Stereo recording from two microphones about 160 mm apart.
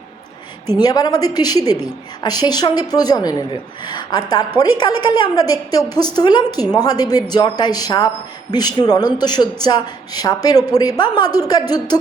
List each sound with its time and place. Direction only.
0.8 s a man's voice: 25° left (ahead or behind)